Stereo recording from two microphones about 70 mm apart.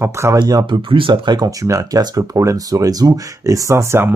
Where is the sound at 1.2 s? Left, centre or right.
Right.